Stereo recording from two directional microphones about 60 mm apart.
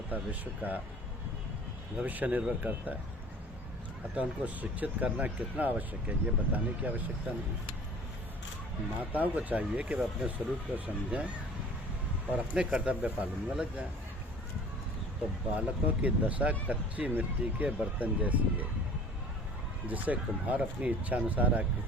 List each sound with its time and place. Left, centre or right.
0.1 s speech: right
2.0 s speech: right
4.1 s speech: right
9.0 s speech: right
12.3 s speech: centre
15.5 s speech: right
19.9 s speech: right